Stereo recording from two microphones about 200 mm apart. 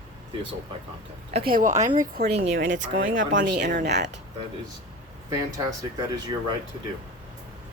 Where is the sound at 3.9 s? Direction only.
60° right (ahead or behind).